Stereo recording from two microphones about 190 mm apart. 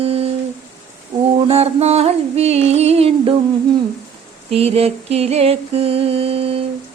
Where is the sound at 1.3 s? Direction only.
30° right (ahead or behind).